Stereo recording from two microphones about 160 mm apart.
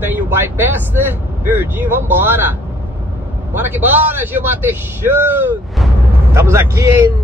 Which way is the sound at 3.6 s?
10° right (ahead or behind).